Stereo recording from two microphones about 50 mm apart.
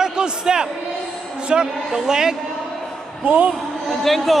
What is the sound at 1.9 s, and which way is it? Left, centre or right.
Speech, centre.